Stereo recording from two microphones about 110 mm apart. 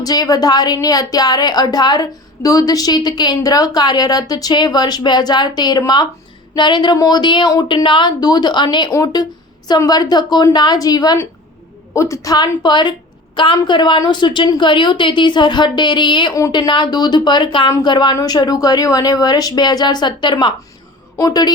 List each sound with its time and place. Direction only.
0.0 s a woman's voice: 35° left (ahead or behind)